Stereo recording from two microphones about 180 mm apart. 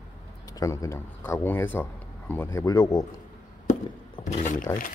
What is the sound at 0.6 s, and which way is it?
A man's voice, 15° left (ahead or behind).